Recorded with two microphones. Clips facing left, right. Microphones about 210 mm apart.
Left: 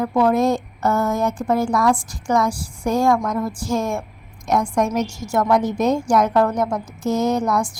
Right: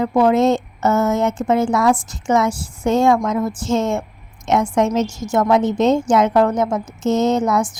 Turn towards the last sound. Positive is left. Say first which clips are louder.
# right 3 dB
turn(degrees=-20)  # may be behind; listen again after turning